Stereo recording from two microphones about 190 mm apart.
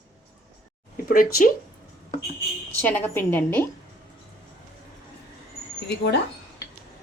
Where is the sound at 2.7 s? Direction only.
10° left (ahead or behind).